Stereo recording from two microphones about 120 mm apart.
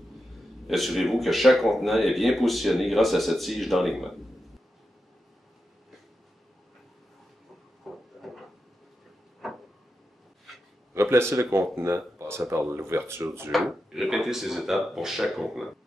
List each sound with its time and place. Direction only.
0.7 s speech: centre (ahead or behind)
7.8 s a sound: centre (ahead or behind)
9.4 s vehicle: centre (ahead or behind)
10.5 s a sound: centre (ahead or behind)
11.0 s speech: 20° right (ahead or behind)
13.5 s speech: centre (ahead or behind)